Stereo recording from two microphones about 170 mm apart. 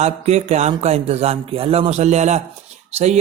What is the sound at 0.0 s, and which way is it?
Speech, 40° right (ahead or behind).